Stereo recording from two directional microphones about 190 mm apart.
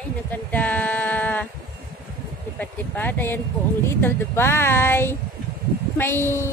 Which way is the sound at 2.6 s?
10° left (ahead or behind).